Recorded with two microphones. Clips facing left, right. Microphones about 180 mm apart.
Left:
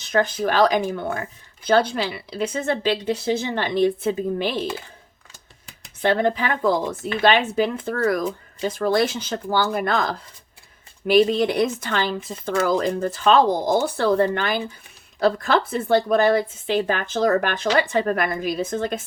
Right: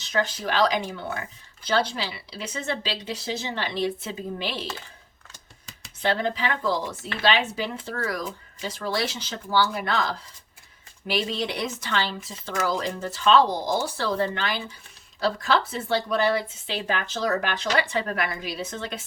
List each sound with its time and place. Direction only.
0.0 s a woman's voice: 55° left (ahead or behind)